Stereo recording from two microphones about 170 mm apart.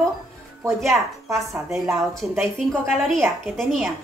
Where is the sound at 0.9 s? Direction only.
20° right (ahead or behind).